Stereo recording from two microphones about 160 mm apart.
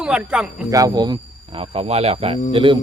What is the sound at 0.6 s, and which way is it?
Speech, 20° right (ahead or behind).